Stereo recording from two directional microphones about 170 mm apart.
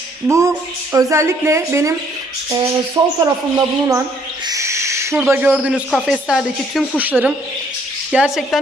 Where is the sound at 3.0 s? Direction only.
25° right (ahead or behind).